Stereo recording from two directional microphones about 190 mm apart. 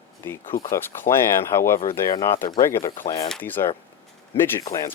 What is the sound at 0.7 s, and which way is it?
Speech, 15° left (ahead or behind).